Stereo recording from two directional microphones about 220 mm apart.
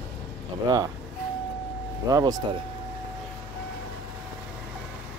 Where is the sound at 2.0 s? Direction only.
15° right (ahead or behind).